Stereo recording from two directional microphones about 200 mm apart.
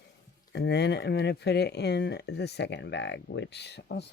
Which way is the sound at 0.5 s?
55° left (ahead or behind).